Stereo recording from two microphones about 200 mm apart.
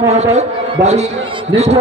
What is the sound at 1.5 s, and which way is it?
Speech, 35° right (ahead or behind).